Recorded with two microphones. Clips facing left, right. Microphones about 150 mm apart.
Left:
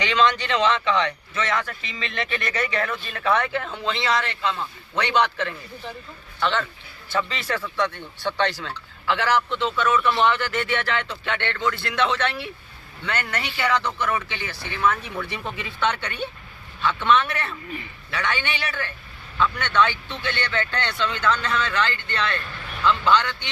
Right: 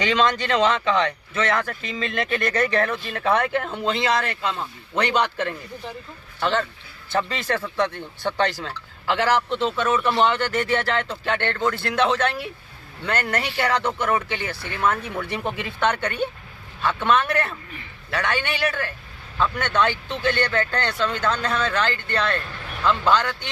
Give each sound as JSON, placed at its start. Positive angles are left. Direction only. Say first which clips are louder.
{"t": 0.0, "sound": "a man's voice", "louder": "even", "side_deg": -40}
{"t": 7.6, "sound": "speech", "louder": "right 2 dB", "side_deg": -30}
{"t": 8.2, "sound": "a man's voice", "louder": "right 1 dB", "side_deg": -45}